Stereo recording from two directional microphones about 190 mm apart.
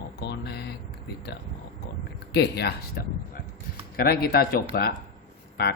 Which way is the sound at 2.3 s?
60° left (ahead or behind).